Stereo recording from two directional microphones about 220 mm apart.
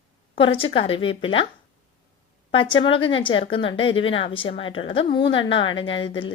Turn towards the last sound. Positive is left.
turn(degrees=25)  # may be behind; listen again after turning